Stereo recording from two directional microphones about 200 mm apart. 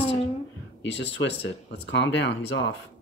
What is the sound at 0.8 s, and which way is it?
Speech, 60° left (ahead or behind).